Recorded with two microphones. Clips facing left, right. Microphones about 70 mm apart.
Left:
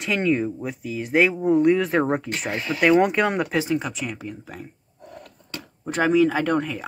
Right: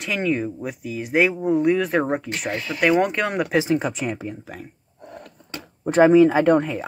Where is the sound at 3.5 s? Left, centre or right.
Centre.